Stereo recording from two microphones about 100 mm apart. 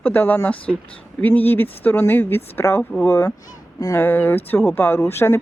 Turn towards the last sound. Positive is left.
turn(degrees=25)  # may be behind; listen again after turning